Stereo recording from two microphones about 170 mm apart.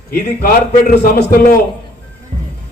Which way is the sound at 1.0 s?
65° left (ahead or behind).